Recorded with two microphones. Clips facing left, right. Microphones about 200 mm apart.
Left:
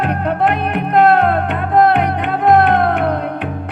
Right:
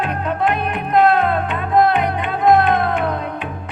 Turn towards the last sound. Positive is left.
turn(degrees=65)  # may be behind; listen again after turning